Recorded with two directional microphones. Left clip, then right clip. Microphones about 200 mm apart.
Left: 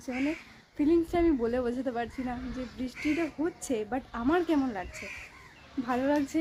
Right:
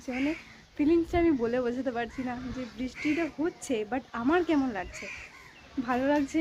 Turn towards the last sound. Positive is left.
turn(degrees=0)  # may be behind; listen again after turning